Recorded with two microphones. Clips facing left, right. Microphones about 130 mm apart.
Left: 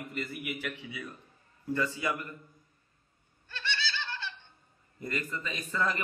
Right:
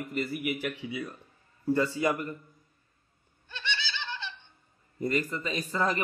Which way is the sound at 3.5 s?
20° right (ahead or behind).